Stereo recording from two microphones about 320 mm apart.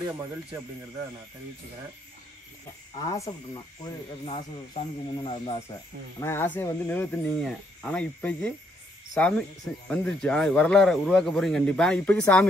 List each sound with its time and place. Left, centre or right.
3.0 s speech: centre